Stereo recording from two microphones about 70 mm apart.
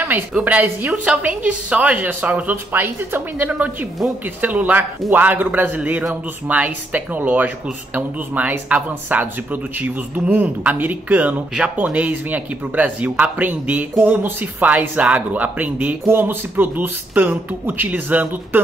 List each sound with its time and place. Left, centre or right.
0.4 s speech: right
2.5 s speech: right
3.4 s speech: right